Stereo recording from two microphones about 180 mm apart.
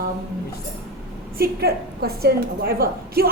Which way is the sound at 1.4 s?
60° right (ahead or behind).